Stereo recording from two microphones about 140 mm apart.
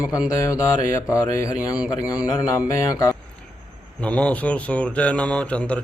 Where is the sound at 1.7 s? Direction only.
10° right (ahead or behind).